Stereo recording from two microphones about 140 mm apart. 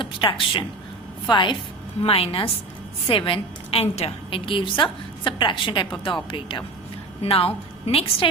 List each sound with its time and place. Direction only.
0.0 s a woman's voice: 35° left (ahead or behind)